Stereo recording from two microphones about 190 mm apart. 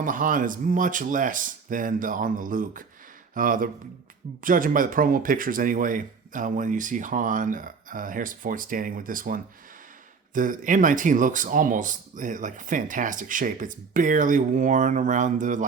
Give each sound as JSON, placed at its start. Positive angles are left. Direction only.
{"t": 0.0, "sound": "speech", "side_deg": -45}